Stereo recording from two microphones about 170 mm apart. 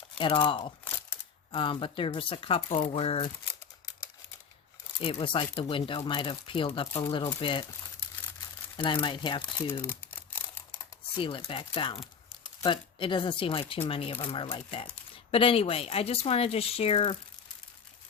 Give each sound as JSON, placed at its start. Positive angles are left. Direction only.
{"t": 0.2, "sound": "speech", "side_deg": 30}
{"t": 5.2, "sound": "speech", "side_deg": 30}
{"t": 8.7, "sound": "speech", "side_deg": 30}
{"t": 9.8, "sound": "crumpling", "side_deg": 10}
{"t": 11.2, "sound": "speech", "side_deg": 30}